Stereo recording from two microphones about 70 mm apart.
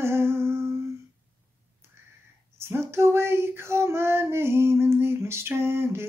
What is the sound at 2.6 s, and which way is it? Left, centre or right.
Female singing, right.